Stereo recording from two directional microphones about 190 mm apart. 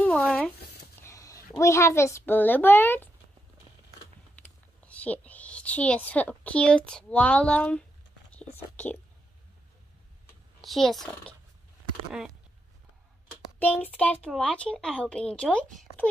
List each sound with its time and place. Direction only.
0.0 s a sound: 5° left (ahead or behind)
1.0 s a sound: 15° left (ahead or behind)
1.6 s a child's voice: 15° left (ahead or behind)
4.4 s speech: 5° left (ahead or behind)
10.6 s speech: centre (ahead or behind)
13.8 s speech: 5° left (ahead or behind)